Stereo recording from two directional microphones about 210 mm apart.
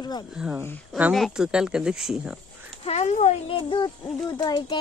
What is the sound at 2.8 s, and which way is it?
A woman's voice, 30° left (ahead or behind).